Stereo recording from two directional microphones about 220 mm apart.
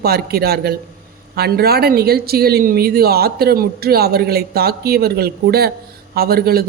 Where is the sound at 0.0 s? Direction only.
45° right (ahead or behind).